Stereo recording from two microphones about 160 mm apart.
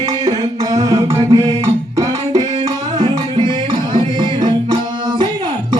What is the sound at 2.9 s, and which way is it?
Music, 30° right (ahead or behind).